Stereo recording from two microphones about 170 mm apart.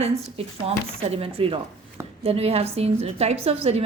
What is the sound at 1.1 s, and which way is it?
A woman's voice, 35° right (ahead or behind).